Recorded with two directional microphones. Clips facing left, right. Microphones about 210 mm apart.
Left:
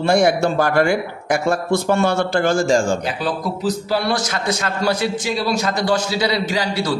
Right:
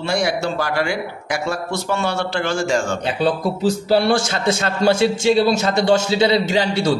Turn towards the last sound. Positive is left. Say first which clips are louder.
# right 3 dB
turn(degrees=-25)  # may be behind; listen again after turning